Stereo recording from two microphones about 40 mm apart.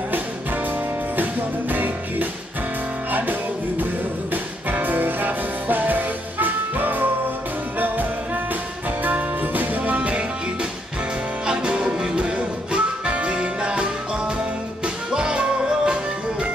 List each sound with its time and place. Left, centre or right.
1.7 s music: right
9.0 s music: right
11.4 s music: right
15.1 s music: right